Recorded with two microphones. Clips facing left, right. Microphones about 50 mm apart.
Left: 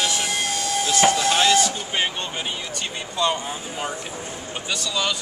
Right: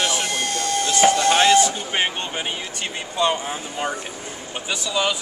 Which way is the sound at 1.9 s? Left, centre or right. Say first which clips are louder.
Right 2 dB; right.